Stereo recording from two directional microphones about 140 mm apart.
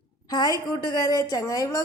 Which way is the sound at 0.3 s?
25° left (ahead or behind).